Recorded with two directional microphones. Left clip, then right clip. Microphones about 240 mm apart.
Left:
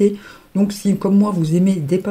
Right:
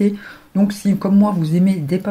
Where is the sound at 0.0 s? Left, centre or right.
Left.